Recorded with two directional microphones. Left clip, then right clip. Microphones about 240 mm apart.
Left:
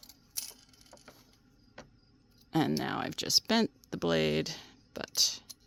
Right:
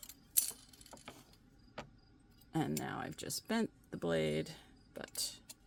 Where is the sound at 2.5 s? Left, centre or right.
Left.